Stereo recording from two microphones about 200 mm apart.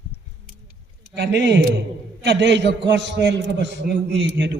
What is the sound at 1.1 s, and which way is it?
A man's voice, 55° right (ahead or behind).